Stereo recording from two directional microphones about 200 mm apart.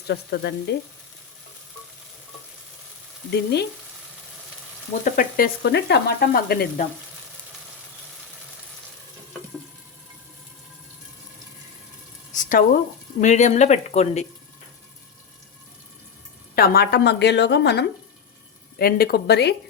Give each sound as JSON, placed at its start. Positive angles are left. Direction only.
{"t": 0.1, "sound": "a woman's voice", "side_deg": 55}
{"t": 3.3, "sound": "a woman's voice", "side_deg": 55}
{"t": 5.0, "sound": "sizzle", "side_deg": 45}
{"t": 12.3, "sound": "sizzle", "side_deg": 40}
{"t": 13.2, "sound": "speech", "side_deg": 35}
{"t": 16.6, "sound": "a woman's voice", "side_deg": 50}
{"t": 18.8, "sound": "sizzle", "side_deg": 50}